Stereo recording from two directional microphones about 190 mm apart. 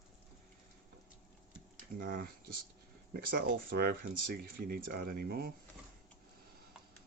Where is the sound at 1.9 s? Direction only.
50° right (ahead or behind).